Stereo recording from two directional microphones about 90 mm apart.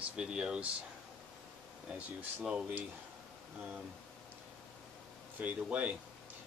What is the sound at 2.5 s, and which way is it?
Speech, 15° right (ahead or behind).